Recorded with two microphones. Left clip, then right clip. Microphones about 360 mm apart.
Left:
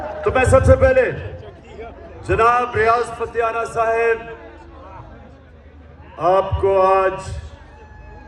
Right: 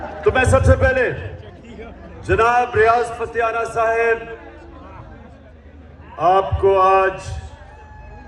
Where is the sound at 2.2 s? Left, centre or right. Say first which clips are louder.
Even; centre.